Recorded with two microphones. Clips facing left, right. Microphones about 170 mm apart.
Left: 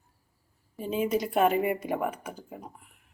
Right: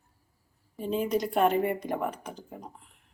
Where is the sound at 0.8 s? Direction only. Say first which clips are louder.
Even; 5° left (ahead or behind).